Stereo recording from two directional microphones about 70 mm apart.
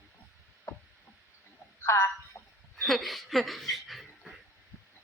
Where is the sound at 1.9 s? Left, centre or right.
Left.